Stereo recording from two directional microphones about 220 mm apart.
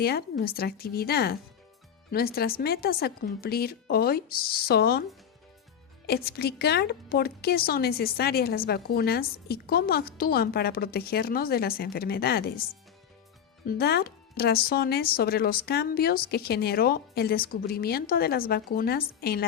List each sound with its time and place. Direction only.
0.0 s speech: 45° left (ahead or behind)
6.1 s speech: 45° left (ahead or behind)
13.7 s speech: 45° left (ahead or behind)